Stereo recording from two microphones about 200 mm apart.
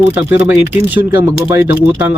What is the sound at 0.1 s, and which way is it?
Speech, 10° right (ahead or behind).